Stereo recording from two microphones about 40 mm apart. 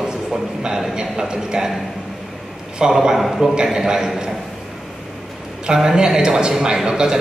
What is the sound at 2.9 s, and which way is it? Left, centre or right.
A man's voice, centre.